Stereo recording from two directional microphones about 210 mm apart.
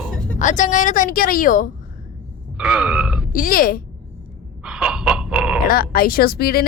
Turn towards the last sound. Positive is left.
turn(degrees=45)  # may be behind; listen again after turning